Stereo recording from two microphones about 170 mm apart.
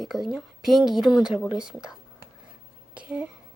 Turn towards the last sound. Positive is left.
turn(degrees=-5)  # may be behind; listen again after turning